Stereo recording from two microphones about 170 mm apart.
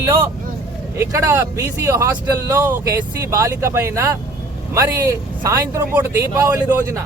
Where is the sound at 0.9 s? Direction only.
15° right (ahead or behind).